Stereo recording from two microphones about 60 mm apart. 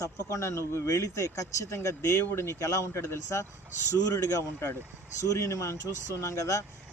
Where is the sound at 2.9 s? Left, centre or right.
Left.